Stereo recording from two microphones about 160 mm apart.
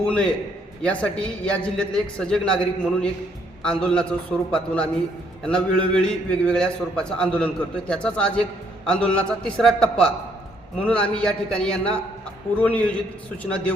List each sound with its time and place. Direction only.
0.0 s a man's voice: 5° left (ahead or behind)